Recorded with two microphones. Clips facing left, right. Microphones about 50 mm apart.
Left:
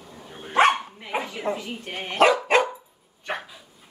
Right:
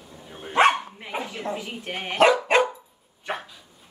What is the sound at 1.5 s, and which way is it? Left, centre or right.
Speech, centre.